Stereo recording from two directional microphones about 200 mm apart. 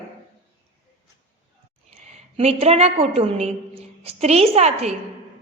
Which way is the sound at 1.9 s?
35° right (ahead or behind).